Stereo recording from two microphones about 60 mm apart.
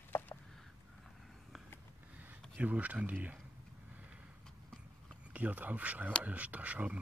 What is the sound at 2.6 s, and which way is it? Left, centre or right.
Speech, right.